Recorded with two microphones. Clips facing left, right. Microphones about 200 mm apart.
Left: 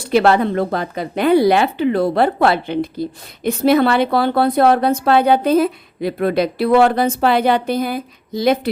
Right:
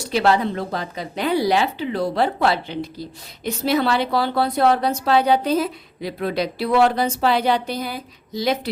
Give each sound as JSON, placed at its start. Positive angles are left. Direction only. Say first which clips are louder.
{"t": 0.0, "sound": "speech", "louder": "left 5 dB", "side_deg": 55}